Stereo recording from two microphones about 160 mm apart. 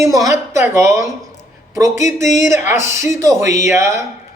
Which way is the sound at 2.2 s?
50° left (ahead or behind).